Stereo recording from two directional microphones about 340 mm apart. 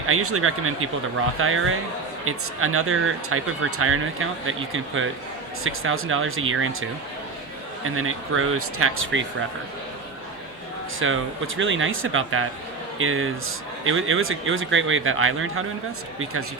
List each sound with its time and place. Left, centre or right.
0.1 s speech: right
7.9 s speech: right
11.0 s speech: right